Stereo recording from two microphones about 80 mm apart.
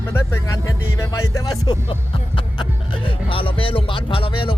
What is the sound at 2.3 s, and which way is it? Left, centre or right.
Speech, left.